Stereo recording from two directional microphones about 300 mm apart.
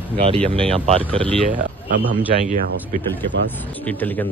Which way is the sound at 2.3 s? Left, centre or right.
Right.